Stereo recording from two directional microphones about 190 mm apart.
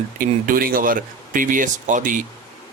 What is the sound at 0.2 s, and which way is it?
Speech, 45° right (ahead or behind).